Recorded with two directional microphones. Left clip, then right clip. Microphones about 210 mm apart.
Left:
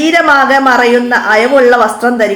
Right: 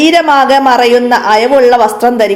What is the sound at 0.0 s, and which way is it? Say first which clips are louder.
A woman's voice: right 1 dB; 25° right (ahead or behind).